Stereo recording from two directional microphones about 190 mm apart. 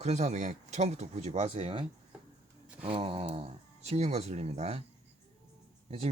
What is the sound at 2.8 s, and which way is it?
Speech, 30° right (ahead or behind).